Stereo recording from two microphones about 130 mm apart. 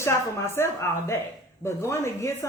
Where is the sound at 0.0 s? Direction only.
20° left (ahead or behind).